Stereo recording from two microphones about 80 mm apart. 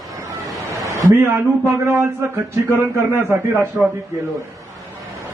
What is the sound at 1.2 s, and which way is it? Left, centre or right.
Speech, right.